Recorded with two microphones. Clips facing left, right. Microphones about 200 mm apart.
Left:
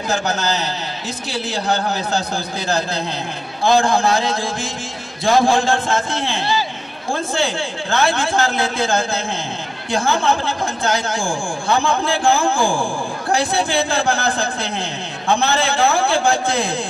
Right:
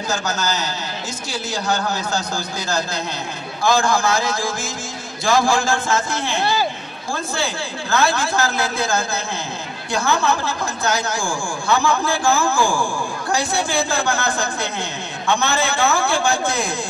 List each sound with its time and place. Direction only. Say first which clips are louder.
0.3 s a man's voice: left 2 dB; 30° left (ahead or behind)